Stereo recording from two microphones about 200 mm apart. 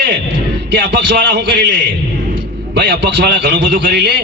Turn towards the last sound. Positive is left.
turn(degrees=-55)  # may be behind; listen again after turning